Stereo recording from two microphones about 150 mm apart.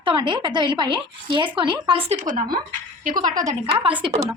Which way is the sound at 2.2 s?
55° right (ahead or behind).